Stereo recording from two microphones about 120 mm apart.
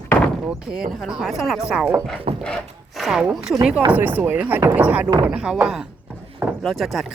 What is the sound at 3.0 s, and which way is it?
Speech, 5° right (ahead or behind).